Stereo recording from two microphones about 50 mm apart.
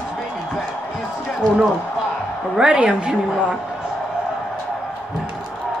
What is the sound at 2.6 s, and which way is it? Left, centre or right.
Speech, centre.